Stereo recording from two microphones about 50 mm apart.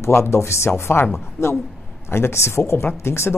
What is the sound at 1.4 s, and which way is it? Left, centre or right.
A woman's voice, left.